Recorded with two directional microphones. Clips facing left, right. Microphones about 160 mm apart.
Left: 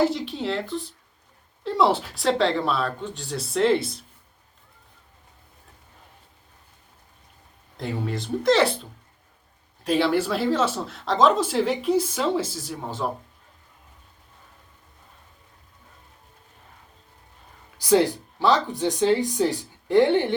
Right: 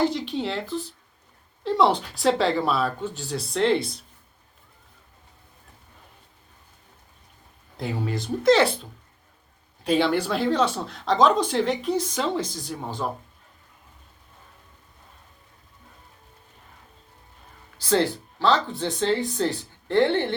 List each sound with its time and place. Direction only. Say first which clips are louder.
0.0 s speech: left 1 dB; centre (ahead or behind)
7.8 s speech: even; centre (ahead or behind)
17.7 s speech: left 3 dB; 15° left (ahead or behind)